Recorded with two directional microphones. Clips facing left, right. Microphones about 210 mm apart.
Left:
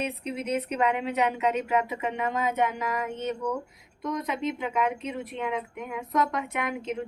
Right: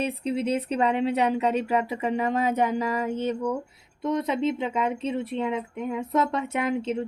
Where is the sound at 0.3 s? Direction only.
30° right (ahead or behind).